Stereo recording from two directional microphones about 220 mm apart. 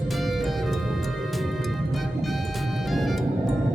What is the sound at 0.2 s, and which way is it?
Music, centre (ahead or behind).